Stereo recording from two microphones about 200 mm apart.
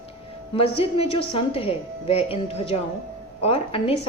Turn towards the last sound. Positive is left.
turn(degrees=30)  # may be behind; listen again after turning